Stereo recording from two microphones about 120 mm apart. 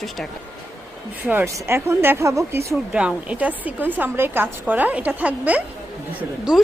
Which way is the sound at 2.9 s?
10° right (ahead or behind).